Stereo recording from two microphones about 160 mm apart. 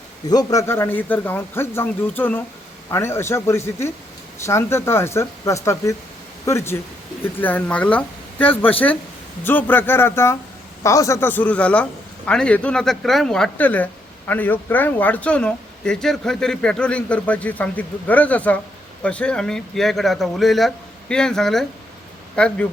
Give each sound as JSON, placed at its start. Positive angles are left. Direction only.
{"t": 0.3, "sound": "a man's voice", "side_deg": 20}